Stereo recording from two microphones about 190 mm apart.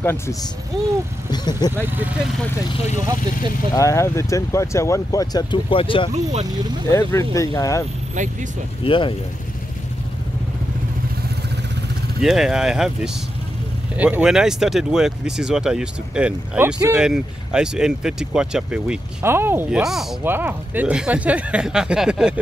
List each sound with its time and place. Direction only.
0.0 s speech: 10° left (ahead or behind)
3.7 s speech: 15° left (ahead or behind)
6.9 s speech: 15° left (ahead or behind)
8.8 s speech: 25° left (ahead or behind)
12.2 s speech: centre (ahead or behind)